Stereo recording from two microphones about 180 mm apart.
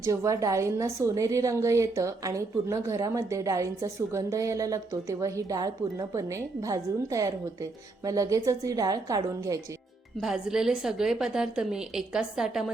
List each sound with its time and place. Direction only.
0.0 s a woman's voice: 15° right (ahead or behind)
10.2 s a woman's voice: 5° right (ahead or behind)